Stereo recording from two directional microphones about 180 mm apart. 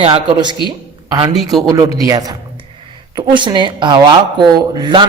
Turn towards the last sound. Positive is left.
turn(degrees=-25)  # may be behind; listen again after turning